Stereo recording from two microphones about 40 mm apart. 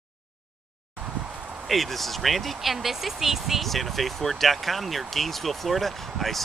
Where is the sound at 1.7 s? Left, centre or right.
Centre.